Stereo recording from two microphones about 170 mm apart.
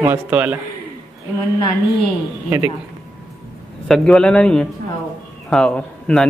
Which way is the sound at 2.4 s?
15° right (ahead or behind).